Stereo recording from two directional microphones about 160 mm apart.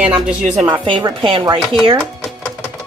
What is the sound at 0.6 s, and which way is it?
Speech, 30° right (ahead or behind).